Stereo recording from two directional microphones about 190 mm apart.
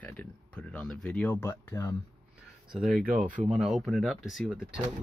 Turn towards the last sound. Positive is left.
turn(degrees=0)  # may be behind; listen again after turning